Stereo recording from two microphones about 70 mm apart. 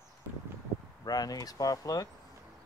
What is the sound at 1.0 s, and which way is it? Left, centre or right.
Speech, left.